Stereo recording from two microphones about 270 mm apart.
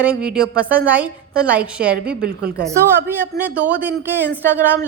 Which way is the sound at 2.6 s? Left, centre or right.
Centre.